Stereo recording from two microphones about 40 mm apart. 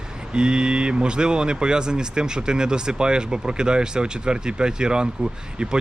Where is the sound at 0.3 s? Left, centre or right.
Right.